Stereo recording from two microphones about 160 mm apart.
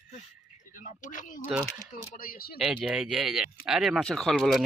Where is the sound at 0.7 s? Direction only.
55° left (ahead or behind).